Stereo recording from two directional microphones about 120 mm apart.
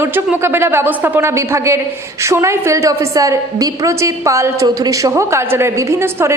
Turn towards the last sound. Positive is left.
turn(degrees=-20)  # may be behind; listen again after turning